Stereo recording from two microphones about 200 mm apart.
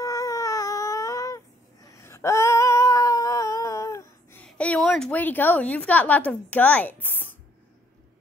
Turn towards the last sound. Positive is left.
turn(degrees=10)  # may be behind; listen again after turning